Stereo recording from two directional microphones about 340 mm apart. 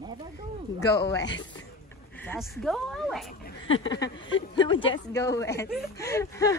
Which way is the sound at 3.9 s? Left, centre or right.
Centre.